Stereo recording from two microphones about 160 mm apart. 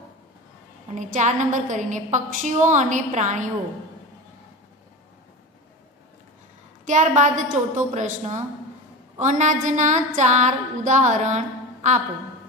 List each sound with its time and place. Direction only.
0.9 s a woman's voice: 50° right (ahead or behind)
6.9 s a woman's voice: 50° right (ahead or behind)